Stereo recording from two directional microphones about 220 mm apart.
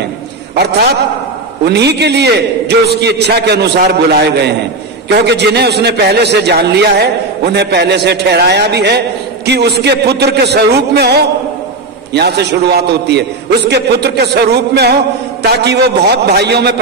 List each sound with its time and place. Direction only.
1.6 s a man's voice: 50° right (ahead or behind)